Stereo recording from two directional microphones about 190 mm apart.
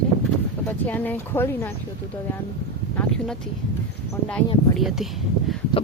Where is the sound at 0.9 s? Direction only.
10° left (ahead or behind).